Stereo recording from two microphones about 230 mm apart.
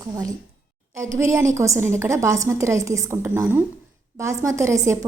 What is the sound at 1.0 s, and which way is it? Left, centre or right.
A woman's voice, centre.